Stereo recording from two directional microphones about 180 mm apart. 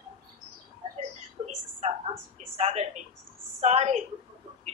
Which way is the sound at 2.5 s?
35° right (ahead or behind).